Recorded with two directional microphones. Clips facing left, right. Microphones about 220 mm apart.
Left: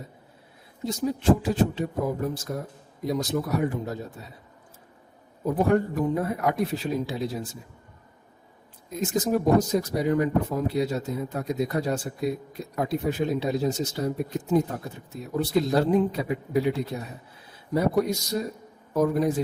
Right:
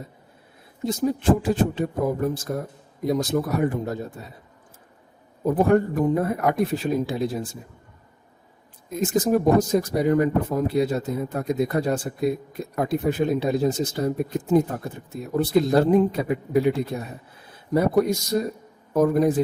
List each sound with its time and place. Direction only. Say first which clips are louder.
0.9 s speech: right 2 dB; 50° right (ahead or behind)
5.5 s speech: right 3 dB; 50° right (ahead or behind)
8.9 s speech: right 4 dB; 50° right (ahead or behind)